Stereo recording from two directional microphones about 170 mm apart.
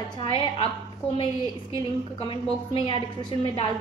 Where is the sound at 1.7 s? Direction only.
30° left (ahead or behind).